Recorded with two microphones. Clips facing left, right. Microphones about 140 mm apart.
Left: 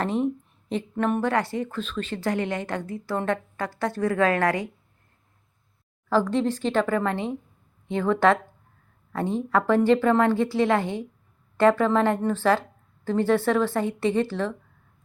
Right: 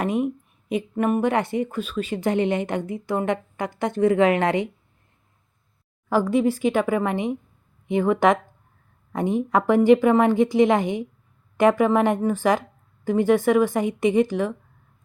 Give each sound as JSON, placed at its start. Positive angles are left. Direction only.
{"t": 0.0, "sound": "speech", "side_deg": -10}
{"t": 1.2, "sound": "speech", "side_deg": -20}
{"t": 6.1, "sound": "a woman's voice", "side_deg": -10}